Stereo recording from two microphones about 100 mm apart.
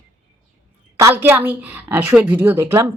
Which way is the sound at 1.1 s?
20° right (ahead or behind).